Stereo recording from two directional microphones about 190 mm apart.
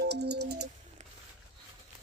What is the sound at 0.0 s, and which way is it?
Music, 60° right (ahead or behind).